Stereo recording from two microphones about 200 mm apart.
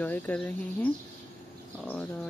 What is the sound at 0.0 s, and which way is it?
Speech, 5° left (ahead or behind).